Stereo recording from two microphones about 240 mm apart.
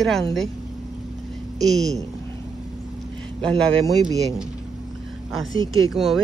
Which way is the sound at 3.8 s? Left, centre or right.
Centre.